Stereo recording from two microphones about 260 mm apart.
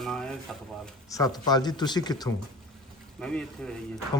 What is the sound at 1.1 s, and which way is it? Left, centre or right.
Speech, centre.